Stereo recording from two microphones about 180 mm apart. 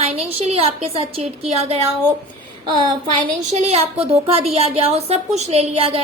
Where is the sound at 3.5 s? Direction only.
35° right (ahead or behind).